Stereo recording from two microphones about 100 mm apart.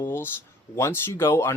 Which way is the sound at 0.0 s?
25° left (ahead or behind).